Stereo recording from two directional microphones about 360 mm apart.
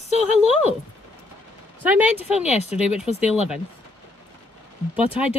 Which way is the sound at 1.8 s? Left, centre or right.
Centre.